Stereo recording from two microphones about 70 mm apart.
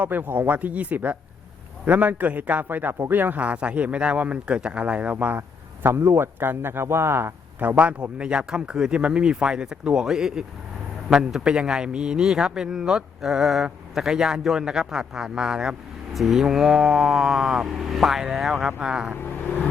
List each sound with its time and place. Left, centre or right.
0.0 s a man's voice: right
5.1 s a man's voice: right
7.8 s a man's voice: centre